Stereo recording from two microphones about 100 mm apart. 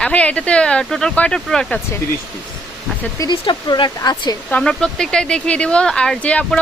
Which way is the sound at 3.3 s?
50° left (ahead or behind).